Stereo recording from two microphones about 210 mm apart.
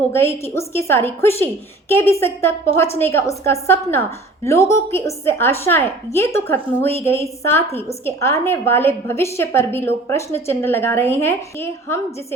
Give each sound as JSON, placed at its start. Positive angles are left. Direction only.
{"t": 0.1, "sound": "a woman's voice", "side_deg": 10}